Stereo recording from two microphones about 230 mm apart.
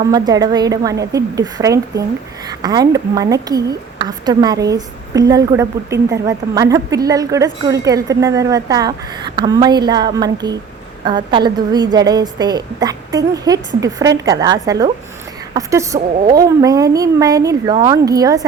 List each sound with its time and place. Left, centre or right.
0.1 s a woman's voice: centre